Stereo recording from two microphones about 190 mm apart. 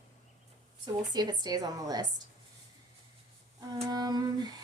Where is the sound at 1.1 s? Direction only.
20° right (ahead or behind).